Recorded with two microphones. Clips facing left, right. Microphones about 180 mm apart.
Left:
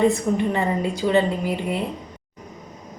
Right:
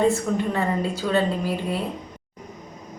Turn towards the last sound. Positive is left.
turn(degrees=15)  # may be behind; listen again after turning